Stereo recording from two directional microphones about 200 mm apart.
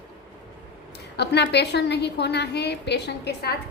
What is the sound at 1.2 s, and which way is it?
A woman's voice, 55° left (ahead or behind).